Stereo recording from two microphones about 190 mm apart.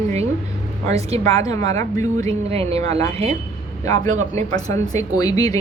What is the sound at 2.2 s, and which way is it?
Speech, 30° right (ahead or behind).